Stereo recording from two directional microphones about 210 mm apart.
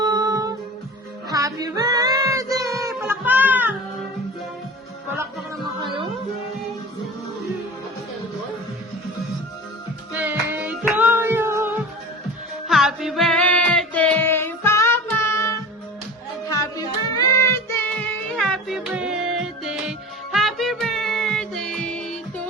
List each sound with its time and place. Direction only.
0.0 s music: 15° right (ahead or behind)
10.1 s music: 10° right (ahead or behind)